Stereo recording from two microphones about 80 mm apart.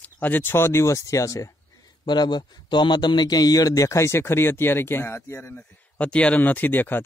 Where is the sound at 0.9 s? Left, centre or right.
Left.